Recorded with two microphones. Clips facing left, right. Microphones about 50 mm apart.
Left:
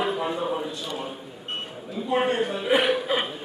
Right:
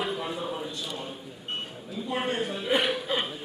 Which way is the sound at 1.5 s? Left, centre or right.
Centre.